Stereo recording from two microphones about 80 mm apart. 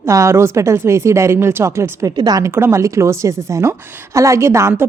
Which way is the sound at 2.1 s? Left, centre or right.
Right.